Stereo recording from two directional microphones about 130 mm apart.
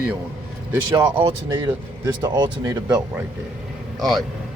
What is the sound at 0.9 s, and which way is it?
Speech, 35° right (ahead or behind).